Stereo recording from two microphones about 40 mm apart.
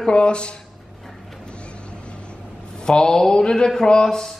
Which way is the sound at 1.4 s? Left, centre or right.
Left.